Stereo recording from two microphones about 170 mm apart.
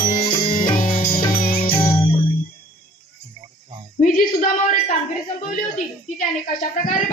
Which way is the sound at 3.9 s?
55° left (ahead or behind).